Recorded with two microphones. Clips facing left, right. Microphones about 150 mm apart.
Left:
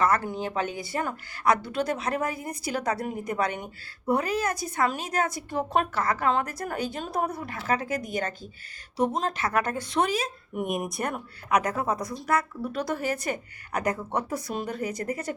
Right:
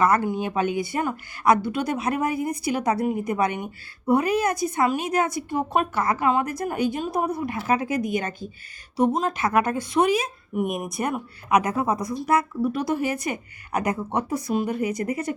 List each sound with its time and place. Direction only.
0.0 s speech: 15° right (ahead or behind)
10.7 s speech: centre (ahead or behind)
11.4 s speech: 20° right (ahead or behind)